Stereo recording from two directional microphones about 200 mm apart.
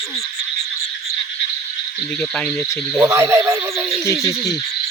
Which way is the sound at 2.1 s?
5° left (ahead or behind).